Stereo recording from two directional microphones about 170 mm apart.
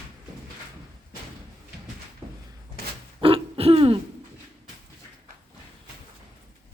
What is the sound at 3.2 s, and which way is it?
Throat clearing, 35° right (ahead or behind).